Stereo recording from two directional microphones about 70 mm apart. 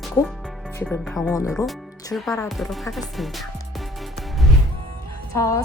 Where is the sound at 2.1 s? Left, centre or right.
Centre.